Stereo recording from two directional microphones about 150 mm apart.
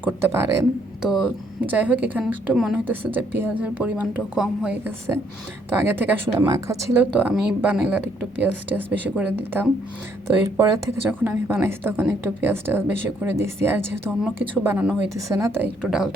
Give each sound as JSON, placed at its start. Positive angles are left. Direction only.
{"t": 0.0, "sound": "speech", "side_deg": -15}
{"t": 1.0, "sound": "a woman's voice", "side_deg": -5}